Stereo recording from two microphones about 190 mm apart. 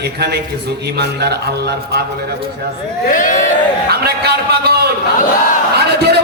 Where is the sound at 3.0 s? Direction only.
45° left (ahead or behind).